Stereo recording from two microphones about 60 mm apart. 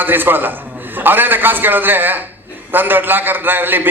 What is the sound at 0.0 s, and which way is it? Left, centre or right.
A man's voice, right.